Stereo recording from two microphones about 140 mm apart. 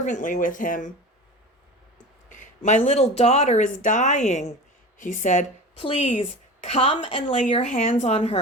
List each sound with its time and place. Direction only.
0.0 s speech: 65° left (ahead or behind)
2.3 s speech: 60° left (ahead or behind)
4.9 s a woman's voice: 65° left (ahead or behind)
5.8 s a woman's voice: 50° left (ahead or behind)